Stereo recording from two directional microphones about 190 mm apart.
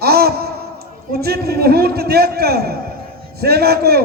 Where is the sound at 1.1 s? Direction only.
55° right (ahead or behind).